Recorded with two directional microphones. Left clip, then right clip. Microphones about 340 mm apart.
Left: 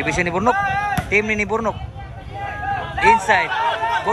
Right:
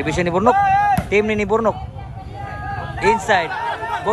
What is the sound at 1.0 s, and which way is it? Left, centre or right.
Speech, centre.